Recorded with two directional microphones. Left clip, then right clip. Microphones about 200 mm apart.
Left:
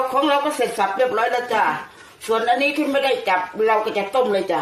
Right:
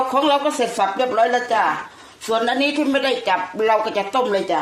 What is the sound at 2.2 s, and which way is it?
Speech, 45° right (ahead or behind).